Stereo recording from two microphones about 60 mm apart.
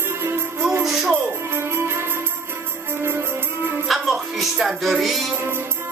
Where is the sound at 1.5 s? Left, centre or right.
Right.